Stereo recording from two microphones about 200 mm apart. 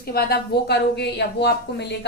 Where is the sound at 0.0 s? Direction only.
50° left (ahead or behind).